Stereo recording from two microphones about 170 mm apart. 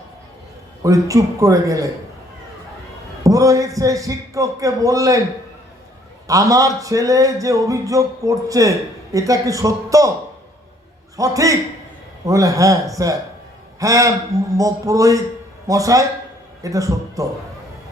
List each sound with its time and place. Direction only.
0.8 s speech: 20° right (ahead or behind)
3.2 s speech: 20° right (ahead or behind)
6.2 s speech: 20° right (ahead or behind)
11.2 s a man's voice: 20° right (ahead or behind)